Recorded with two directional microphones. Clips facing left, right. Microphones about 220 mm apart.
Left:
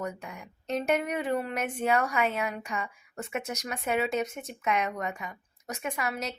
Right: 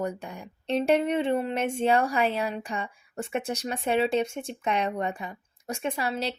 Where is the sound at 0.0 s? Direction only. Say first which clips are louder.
Right 4 dB; 30° right (ahead or behind).